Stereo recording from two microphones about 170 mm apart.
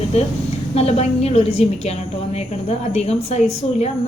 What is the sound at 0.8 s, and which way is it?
A woman's voice, 40° left (ahead or behind).